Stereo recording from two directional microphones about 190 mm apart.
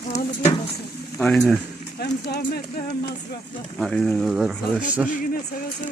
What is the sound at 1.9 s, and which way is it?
Speech, 60° left (ahead or behind).